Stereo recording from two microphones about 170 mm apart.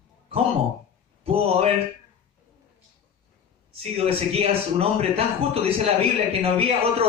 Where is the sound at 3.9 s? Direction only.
35° right (ahead or behind).